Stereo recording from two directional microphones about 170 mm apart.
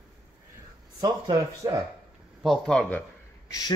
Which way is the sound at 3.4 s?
20° left (ahead or behind).